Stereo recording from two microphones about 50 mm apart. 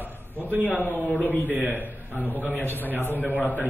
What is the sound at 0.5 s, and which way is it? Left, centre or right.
Speech, right.